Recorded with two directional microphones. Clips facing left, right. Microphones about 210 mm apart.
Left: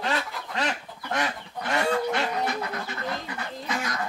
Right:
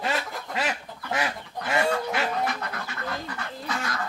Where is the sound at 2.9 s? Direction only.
20° left (ahead or behind).